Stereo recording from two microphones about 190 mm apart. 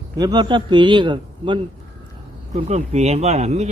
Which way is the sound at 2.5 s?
35° right (ahead or behind).